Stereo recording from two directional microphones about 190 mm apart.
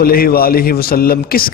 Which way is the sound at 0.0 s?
50° left (ahead or behind).